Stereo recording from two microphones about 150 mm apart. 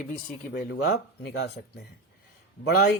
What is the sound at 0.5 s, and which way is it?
Speech, 90° left.